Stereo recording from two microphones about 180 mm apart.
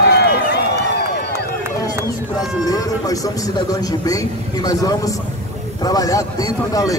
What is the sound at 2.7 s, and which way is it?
Speech, 20° left (ahead or behind).